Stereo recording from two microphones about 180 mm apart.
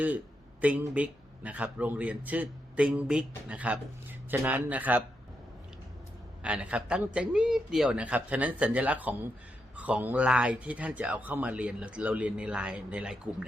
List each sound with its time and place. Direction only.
0.6 s a man's voice: 10° right (ahead or behind)
6.4 s a man's voice: 5° right (ahead or behind)